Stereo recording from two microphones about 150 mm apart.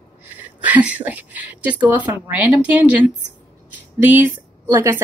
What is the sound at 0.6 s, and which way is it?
A woman's voice, 10° right (ahead or behind).